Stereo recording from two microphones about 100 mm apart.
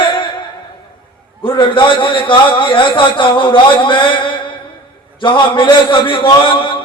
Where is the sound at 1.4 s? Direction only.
60° left (ahead or behind).